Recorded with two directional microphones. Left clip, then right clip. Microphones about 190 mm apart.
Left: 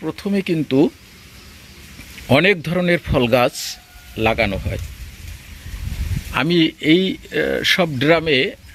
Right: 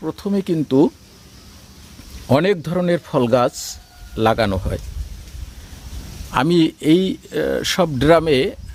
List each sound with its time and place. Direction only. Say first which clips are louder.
0.0 s speech: even; 5° right (ahead or behind)
2.2 s speech: left 2 dB; 5° right (ahead or behind)
4.2 s a man's voice: right 1 dB; 25° right (ahead or behind)
6.3 s speech: right 1 dB; 15° right (ahead or behind)